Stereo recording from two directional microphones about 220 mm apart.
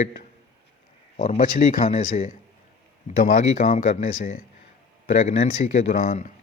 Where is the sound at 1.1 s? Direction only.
35° left (ahead or behind).